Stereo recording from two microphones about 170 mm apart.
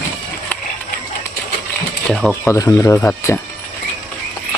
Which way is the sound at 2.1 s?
Centre (ahead or behind).